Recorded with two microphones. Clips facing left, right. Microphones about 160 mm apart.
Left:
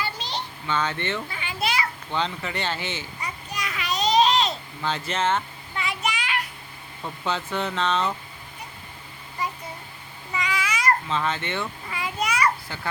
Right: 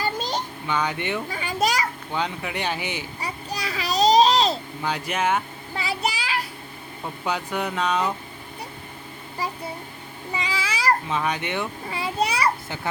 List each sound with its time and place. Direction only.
0.0 s a sound: 45° right (ahead or behind)
0.7 s speech: 15° right (ahead or behind)
1.3 s children playing: 40° right (ahead or behind)
2.1 s speech: 10° right (ahead or behind)
3.2 s babbling: 35° right (ahead or behind)
4.8 s speech: 10° right (ahead or behind)
5.7 s child singing: 35° right (ahead or behind)
7.0 s speech: 10° right (ahead or behind)
9.4 s a child's voice: 35° right (ahead or behind)
10.3 s a sound: 30° right (ahead or behind)
11.1 s speech: 15° right (ahead or behind)
11.9 s a child's voice: 30° right (ahead or behind)
12.6 s a child's voice: 20° right (ahead or behind)